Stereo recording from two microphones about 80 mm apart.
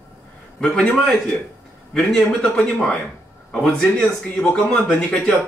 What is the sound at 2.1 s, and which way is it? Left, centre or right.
Speech, centre.